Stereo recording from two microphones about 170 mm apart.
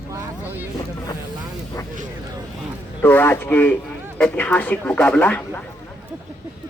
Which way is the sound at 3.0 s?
10° left (ahead or behind).